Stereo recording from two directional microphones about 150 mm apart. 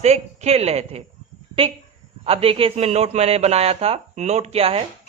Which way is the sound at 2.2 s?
40° right (ahead or behind).